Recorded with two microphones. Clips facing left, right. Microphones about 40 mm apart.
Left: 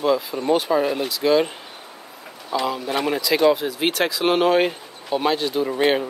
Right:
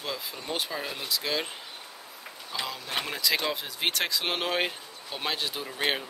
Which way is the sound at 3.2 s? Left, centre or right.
Centre.